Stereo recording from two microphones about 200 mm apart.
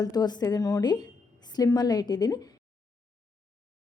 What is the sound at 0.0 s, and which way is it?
A woman's voice, 20° left (ahead or behind).